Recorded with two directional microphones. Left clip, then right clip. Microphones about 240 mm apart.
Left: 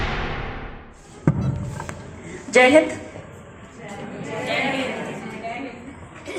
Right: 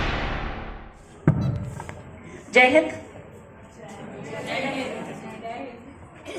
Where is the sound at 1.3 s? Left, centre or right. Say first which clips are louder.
Left 1 dB; left.